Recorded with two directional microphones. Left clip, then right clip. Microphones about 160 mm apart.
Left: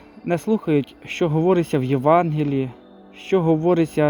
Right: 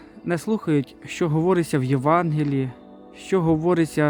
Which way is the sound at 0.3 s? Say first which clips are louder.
Left 3 dB; 30° right (ahead or behind).